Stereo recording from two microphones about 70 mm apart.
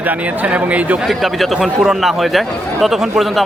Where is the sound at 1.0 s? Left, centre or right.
Centre.